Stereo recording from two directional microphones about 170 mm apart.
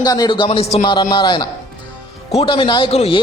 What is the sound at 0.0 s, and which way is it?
A man's voice, 25° left (ahead or behind).